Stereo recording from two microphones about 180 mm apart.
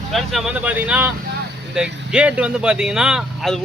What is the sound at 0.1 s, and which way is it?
Speech, centre (ahead or behind).